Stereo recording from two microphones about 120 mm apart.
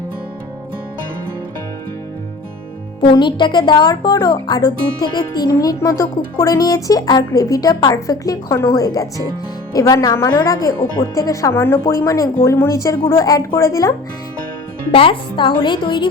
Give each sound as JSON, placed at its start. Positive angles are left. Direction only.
{"t": 3.0, "sound": "speech", "side_deg": 40}
{"t": 14.9, "sound": "speech", "side_deg": 45}